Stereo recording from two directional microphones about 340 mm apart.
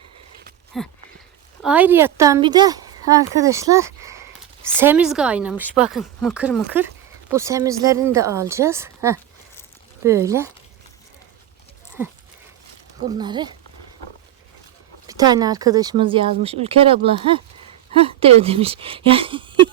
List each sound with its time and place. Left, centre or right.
0.7 s a woman's voice: centre
13.1 s speech: centre
15.0 s speech: centre